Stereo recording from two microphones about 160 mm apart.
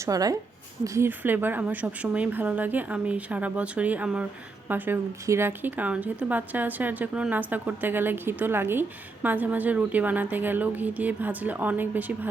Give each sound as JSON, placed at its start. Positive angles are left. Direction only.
{"t": 0.0, "sound": "a woman's voice", "side_deg": -20}